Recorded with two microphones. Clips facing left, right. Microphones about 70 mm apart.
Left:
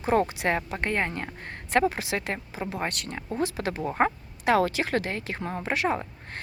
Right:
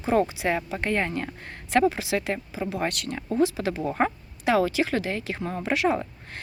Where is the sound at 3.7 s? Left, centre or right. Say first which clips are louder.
Right 2 dB; centre.